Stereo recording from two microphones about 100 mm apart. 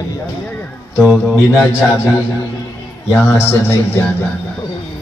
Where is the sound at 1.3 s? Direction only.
30° left (ahead or behind).